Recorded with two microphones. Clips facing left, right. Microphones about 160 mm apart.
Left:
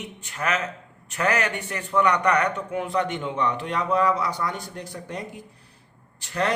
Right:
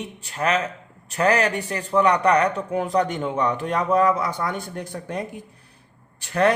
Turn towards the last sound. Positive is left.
turn(degrees=-55)  # may be behind; listen again after turning